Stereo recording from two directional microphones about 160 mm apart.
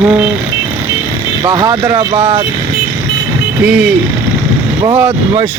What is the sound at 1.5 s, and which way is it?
Speech, 25° right (ahead or behind).